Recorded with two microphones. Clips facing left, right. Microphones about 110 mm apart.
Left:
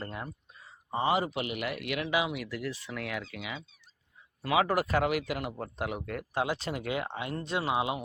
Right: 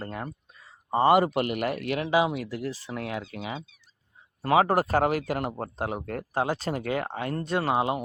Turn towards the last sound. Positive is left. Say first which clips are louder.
# right 5 dB
turn(degrees=-40)  # may be behind; listen again after turning